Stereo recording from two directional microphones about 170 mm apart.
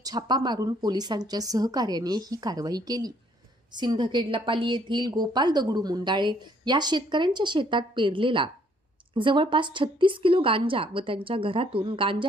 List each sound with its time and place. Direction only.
0.0 s a woman's voice: 25° right (ahead or behind)